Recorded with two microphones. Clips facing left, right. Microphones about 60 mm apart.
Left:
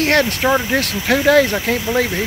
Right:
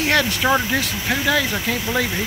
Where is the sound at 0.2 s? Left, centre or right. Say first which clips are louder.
Left 3 dB; left.